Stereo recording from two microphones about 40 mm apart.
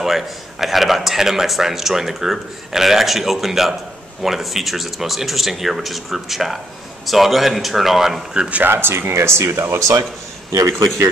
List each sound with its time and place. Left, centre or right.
0.0 s a man's voice: centre
8.4 s speech: right
8.6 s speech: right